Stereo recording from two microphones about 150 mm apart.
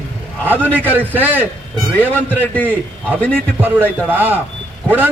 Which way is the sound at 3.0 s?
10° left (ahead or behind).